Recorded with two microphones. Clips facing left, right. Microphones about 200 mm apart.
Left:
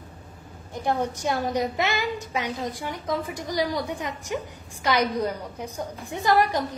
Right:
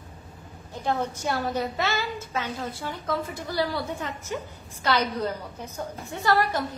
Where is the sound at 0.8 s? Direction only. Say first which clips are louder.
Left 2 dB; 15° left (ahead or behind).